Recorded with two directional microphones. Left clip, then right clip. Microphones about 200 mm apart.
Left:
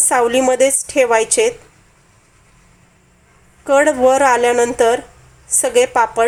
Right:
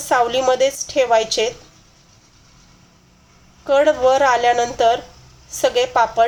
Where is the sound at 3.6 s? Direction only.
30° left (ahead or behind).